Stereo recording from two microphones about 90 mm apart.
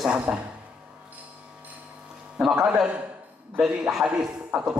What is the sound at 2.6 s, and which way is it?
A man's voice, 10° right (ahead or behind).